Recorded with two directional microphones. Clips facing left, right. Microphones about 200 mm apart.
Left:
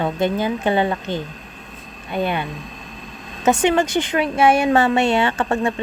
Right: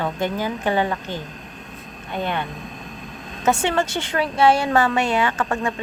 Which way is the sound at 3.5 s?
15° left (ahead or behind).